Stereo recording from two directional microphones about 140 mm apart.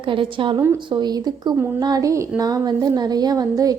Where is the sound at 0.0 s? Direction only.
40° right (ahead or behind).